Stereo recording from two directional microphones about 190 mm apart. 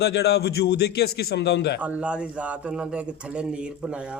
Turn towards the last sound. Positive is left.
turn(degrees=-5)  # may be behind; listen again after turning